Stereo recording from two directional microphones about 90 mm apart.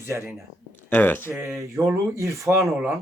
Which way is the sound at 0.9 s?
20° left (ahead or behind).